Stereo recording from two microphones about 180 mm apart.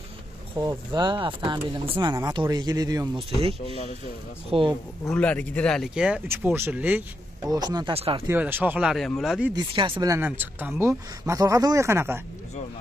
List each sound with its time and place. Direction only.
0.6 s speech: 25° right (ahead or behind)
4.5 s speech: 30° right (ahead or behind)
5.0 s speech: 5° left (ahead or behind); by 7.0 s 10° right (ahead or behind)
7.5 s speech: 20° right (ahead or behind)
8.3 s speech: 10° right (ahead or behind)
9.6 s speech: 25° right (ahead or behind)